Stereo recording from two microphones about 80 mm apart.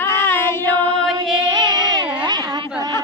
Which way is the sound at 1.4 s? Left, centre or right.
Right.